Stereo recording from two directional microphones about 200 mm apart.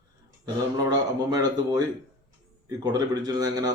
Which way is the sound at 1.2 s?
20° right (ahead or behind).